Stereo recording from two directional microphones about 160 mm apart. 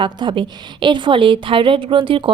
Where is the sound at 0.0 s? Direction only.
30° right (ahead or behind).